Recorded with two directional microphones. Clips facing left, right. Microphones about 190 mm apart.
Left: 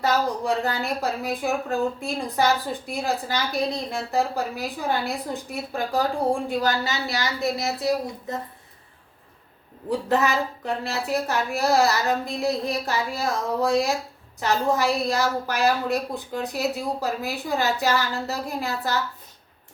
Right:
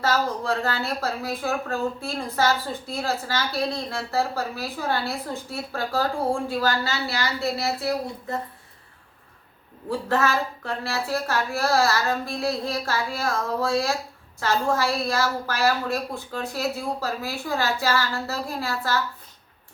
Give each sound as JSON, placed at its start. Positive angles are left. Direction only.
{"t": 0.0, "sound": "a woman's voice", "side_deg": 15}
{"t": 9.9, "sound": "a woman's voice", "side_deg": 15}